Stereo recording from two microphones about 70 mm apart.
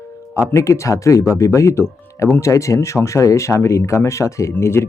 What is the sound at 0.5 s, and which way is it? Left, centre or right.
Speech, left.